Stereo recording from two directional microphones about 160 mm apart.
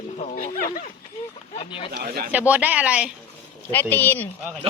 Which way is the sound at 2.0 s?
70° right (ahead or behind).